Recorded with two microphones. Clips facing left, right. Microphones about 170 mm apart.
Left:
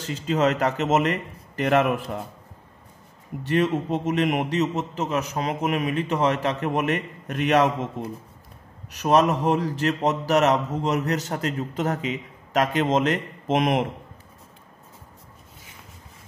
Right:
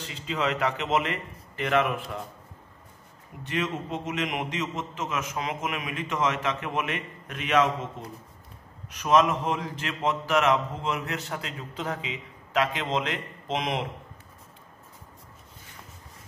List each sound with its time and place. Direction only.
0.0 s a man's voice: 45° left (ahead or behind)
3.4 s a man's voice: 40° left (ahead or behind)
9.0 s a man's voice: 40° left (ahead or behind)